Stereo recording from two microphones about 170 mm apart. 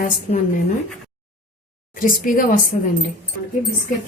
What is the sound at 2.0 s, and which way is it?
Speech, 55° left (ahead or behind).